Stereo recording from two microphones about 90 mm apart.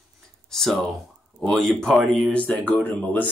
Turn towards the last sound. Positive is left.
turn(degrees=20)  # may be behind; listen again after turning